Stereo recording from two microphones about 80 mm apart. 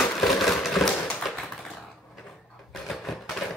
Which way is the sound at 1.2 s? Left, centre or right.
Centre.